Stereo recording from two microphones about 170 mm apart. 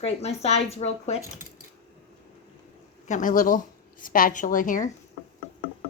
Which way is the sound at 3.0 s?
50° left (ahead or behind).